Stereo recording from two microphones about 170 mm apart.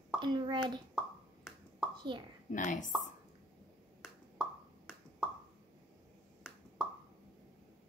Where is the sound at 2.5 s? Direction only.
50° left (ahead or behind).